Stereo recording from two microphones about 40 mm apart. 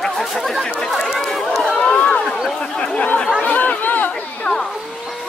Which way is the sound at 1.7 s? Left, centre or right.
Left.